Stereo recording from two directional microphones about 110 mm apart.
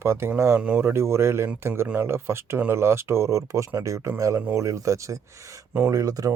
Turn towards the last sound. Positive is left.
turn(degrees=-35)  # may be behind; listen again after turning